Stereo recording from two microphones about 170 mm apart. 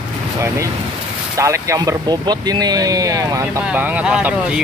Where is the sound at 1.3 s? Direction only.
15° right (ahead or behind).